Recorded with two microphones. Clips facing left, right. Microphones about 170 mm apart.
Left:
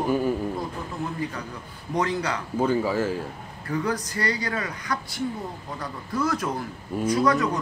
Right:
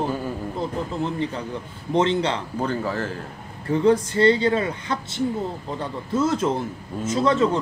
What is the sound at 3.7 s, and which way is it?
Speech, 25° right (ahead or behind).